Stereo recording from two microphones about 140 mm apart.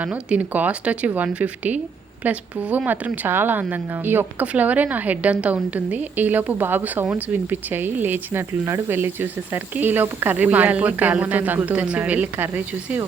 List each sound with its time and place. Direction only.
0.0 s speech: 10° right (ahead or behind)